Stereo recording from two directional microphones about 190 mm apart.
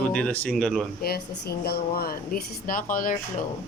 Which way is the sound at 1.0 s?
55° left (ahead or behind).